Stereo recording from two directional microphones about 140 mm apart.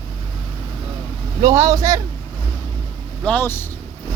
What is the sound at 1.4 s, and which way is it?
Speech, 25° right (ahead or behind).